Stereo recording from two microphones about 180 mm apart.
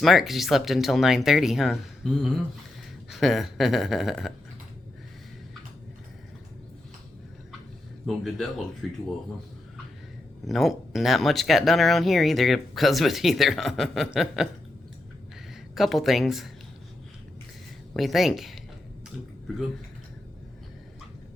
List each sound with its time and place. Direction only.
0.0 s speech: centre (ahead or behind)
8.0 s speech: centre (ahead or behind)
10.4 s speech: centre (ahead or behind)
15.7 s speech: centre (ahead or behind)
17.9 s speech: centre (ahead or behind)